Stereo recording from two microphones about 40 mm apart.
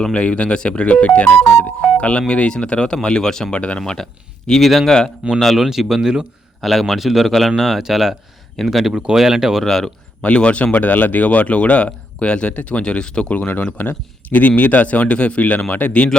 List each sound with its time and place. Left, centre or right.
0.1 s speech: left; by 3.5 s centre
3.5 s speech: left
4.4 s speech: centre
5.5 s speech: centre
6.6 s speech: centre
8.6 s speech: centre
9.1 s speech: centre
9.6 s speech: centre
10.2 s speech: left
12.8 s speech: left
13.3 s speech: left